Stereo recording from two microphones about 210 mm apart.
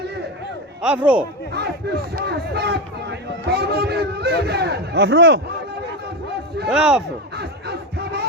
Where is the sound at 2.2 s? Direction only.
50° right (ahead or behind).